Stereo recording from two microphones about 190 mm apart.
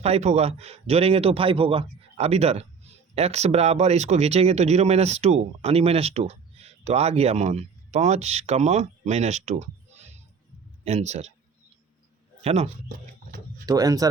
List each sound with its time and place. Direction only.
0.0 s speech: 35° right (ahead or behind)
12.4 s speech: 30° right (ahead or behind)
13.7 s speech: 20° right (ahead or behind)